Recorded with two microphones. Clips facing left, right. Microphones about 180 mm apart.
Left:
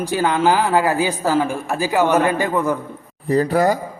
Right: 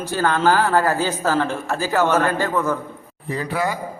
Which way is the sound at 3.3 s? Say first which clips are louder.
Left 8 dB; 40° left (ahead or behind).